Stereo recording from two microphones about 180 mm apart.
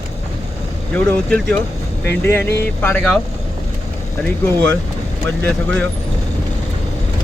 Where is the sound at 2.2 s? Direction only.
10° left (ahead or behind).